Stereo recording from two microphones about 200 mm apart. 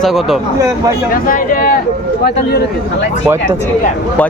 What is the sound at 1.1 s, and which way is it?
Speech, 45° left (ahead or behind).